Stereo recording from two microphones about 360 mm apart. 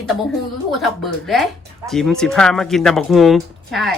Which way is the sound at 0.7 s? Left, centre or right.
Centre.